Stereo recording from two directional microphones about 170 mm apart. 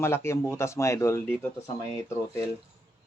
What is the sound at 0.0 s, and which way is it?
Speech, 15° left (ahead or behind).